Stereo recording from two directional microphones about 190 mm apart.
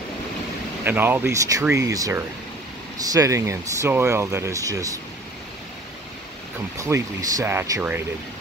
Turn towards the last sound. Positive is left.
turn(degrees=-15)  # may be behind; listen again after turning